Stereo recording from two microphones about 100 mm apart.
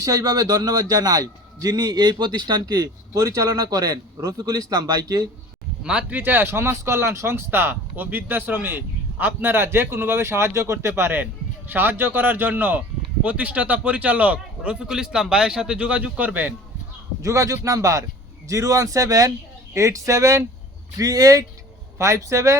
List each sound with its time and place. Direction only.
0.0 s a man's voice: 35° right (ahead or behind)
5.8 s a man's voice: 10° right (ahead or behind)
17.2 s a man's voice: 30° right (ahead or behind)